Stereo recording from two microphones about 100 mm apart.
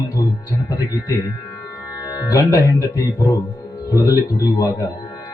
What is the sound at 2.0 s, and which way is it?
Speech, 35° left (ahead or behind).